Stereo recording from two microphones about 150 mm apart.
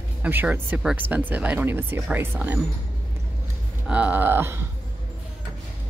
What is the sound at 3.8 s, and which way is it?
Speech, 10° right (ahead or behind).